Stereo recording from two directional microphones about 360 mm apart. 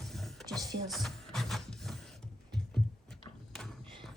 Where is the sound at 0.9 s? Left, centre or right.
Centre.